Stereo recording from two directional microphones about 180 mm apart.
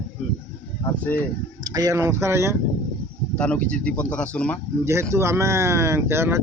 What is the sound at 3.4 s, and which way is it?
Speech, 5° left (ahead or behind).